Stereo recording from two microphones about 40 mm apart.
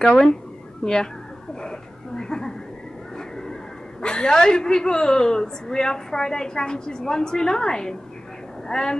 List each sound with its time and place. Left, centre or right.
0.0 s a woman's voice: centre
1.5 s a sound: centre
4.0 s a woman's voice: left